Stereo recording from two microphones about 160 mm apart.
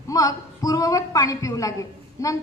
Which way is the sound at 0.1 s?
20° left (ahead or behind).